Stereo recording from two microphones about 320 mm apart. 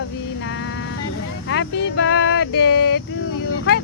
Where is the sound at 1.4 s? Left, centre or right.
Left.